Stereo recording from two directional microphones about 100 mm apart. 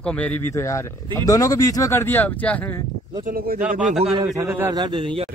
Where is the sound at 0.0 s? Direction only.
10° left (ahead or behind).